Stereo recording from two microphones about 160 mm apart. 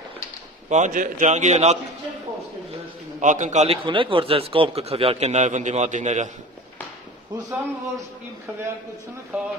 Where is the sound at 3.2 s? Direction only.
50° right (ahead or behind).